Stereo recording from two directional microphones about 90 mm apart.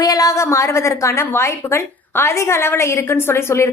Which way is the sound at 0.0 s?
40° left (ahead or behind).